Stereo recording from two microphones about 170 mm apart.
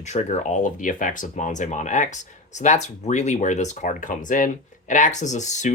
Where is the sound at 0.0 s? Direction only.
40° left (ahead or behind).